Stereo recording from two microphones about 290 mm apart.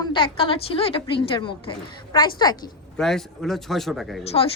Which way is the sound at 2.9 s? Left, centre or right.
Centre.